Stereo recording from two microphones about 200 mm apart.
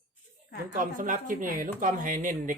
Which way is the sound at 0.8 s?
40° right (ahead or behind).